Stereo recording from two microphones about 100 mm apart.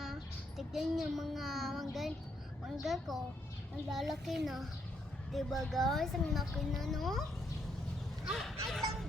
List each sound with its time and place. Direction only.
0.0 s a child's voice: centre (ahead or behind)
8.2 s fowl: centre (ahead or behind)